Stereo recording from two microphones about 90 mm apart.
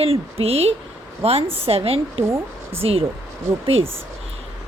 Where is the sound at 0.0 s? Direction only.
90° right.